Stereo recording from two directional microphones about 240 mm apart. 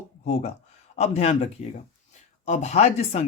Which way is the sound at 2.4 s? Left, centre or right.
Left.